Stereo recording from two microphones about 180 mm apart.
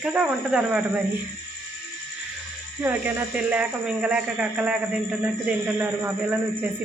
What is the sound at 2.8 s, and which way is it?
Speech, 10° right (ahead or behind).